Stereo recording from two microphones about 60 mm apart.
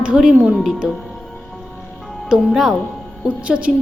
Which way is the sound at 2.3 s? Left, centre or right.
Centre.